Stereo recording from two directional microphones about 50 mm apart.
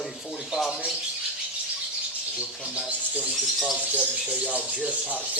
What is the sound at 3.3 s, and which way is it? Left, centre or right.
Speech, centre.